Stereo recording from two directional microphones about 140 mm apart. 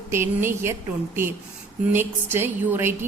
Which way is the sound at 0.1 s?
15° right (ahead or behind).